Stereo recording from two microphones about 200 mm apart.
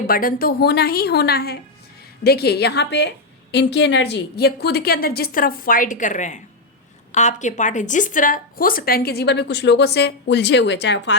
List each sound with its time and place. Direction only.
0.1 s a woman's voice: 45° left (ahead or behind); by 11.1 s 60° left (ahead or behind)